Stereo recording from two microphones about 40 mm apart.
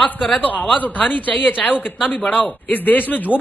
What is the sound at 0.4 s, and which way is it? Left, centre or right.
Speech, left.